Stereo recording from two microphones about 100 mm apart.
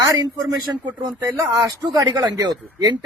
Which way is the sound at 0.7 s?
25° right (ahead or behind).